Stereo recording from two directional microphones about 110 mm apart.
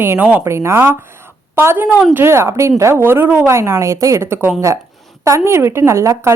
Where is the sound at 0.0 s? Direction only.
15° right (ahead or behind).